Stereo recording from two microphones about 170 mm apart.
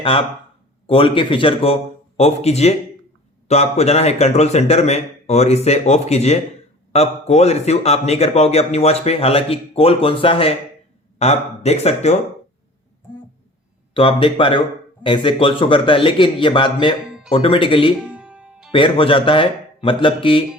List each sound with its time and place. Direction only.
0.0 s a man's voice: 30° left (ahead or behind)
13.9 s a man's voice: 30° left (ahead or behind)
18.0 s music: 5° right (ahead or behind)
18.7 s a man's voice: 30° left (ahead or behind)